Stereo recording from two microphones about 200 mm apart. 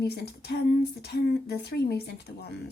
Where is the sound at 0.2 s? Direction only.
55° left (ahead or behind).